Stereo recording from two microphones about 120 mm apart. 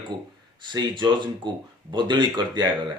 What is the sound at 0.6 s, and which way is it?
Speech, 40° right (ahead or behind).